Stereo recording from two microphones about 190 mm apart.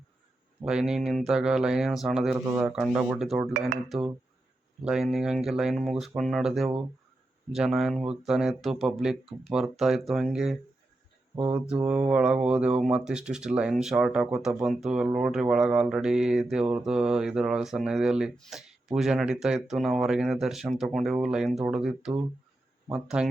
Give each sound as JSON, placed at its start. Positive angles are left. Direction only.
{"t": 0.6, "sound": "speech", "side_deg": -5}
{"t": 11.7, "sound": "speech", "side_deg": -5}